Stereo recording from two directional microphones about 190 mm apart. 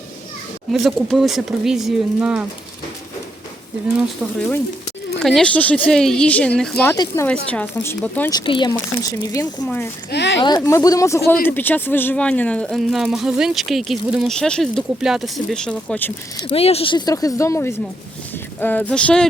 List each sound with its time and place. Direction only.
0.7 s speech: centre (ahead or behind)
4.2 s a woman's voice: 10° left (ahead or behind)
6.9 s speech: 20° left (ahead or behind)
7.3 s a woman's voice: 5° left (ahead or behind)
8.3 s a woman's voice: 25° left (ahead or behind); by 9.9 s 10° left (ahead or behind)
10.1 s speech: 65° left (ahead or behind)
10.4 s a woman's voice: 20° left (ahead or behind)
16.5 s speech: 30° left (ahead or behind); by 19.3 s 5° left (ahead or behind)